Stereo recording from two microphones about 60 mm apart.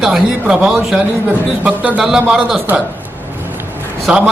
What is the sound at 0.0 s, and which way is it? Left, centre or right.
A man's voice, centre.